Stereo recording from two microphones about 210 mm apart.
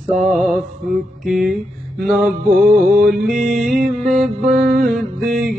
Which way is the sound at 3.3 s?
40° right (ahead or behind).